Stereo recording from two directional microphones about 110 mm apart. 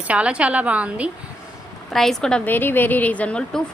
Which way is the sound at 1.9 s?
5° left (ahead or behind).